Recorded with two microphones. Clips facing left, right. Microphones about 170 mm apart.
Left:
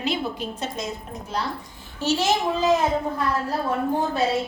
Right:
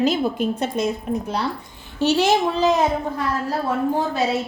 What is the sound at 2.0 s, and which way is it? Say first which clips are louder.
Speech: right 5 dB; 60° right (ahead or behind).